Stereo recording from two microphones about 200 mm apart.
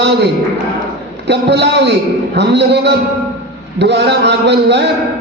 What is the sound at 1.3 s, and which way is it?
A man's voice, 60° right (ahead or behind).